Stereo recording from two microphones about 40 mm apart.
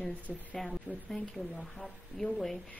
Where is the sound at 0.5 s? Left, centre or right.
Centre.